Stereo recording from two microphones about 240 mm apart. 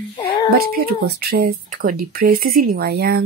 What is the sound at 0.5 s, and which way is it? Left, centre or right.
Speech, right.